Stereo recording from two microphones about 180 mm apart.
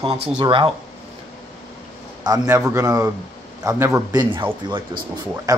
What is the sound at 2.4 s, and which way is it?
Speech, 10° right (ahead or behind).